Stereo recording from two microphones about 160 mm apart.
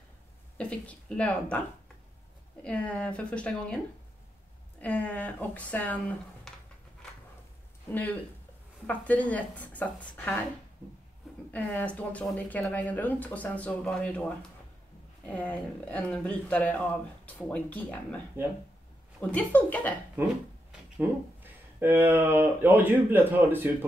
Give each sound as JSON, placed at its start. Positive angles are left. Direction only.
{"t": 0.6, "sound": "speech", "side_deg": 5}
{"t": 2.6, "sound": "speech", "side_deg": 10}
{"t": 7.9, "sound": "speech", "side_deg": 10}
{"t": 11.5, "sound": "speech", "side_deg": 10}
{"t": 15.2, "sound": "speech", "side_deg": 10}
{"t": 18.4, "sound": "speech", "side_deg": -15}
{"t": 19.3, "sound": "speech", "side_deg": 10}
{"t": 21.0, "sound": "speech", "side_deg": -10}